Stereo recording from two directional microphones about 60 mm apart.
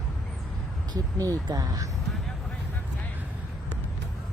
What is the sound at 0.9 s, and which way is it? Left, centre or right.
Speech, right.